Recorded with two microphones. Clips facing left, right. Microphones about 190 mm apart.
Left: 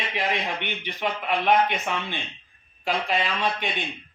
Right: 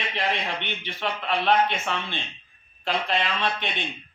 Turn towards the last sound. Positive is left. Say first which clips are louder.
# left 1 dB
turn(degrees=10)  # may be behind; listen again after turning